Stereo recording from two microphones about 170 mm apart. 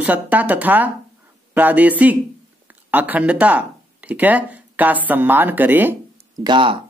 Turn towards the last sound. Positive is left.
turn(degrees=-30)  # may be behind; listen again after turning